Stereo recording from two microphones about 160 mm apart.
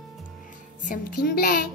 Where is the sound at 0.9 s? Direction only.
70° left (ahead or behind).